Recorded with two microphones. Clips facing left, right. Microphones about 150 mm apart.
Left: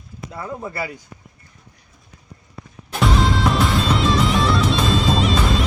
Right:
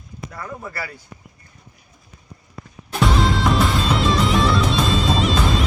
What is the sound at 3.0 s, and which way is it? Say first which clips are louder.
Music: even; centre (ahead or behind).